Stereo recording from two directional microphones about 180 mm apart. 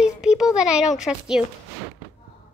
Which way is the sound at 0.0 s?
5° right (ahead or behind).